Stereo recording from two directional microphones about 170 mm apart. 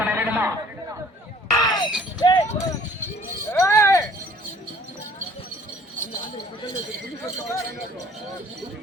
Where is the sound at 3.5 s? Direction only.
15° left (ahead or behind).